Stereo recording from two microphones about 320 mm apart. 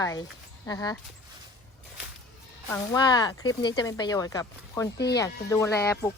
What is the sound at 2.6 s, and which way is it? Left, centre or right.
Speech, centre.